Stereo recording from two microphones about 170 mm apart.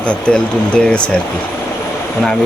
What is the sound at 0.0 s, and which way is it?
Speech, 5° left (ahead or behind).